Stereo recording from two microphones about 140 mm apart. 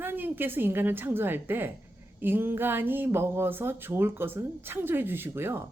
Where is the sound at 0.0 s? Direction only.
15° right (ahead or behind).